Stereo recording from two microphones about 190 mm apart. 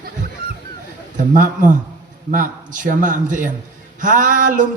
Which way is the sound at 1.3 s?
40° right (ahead or behind).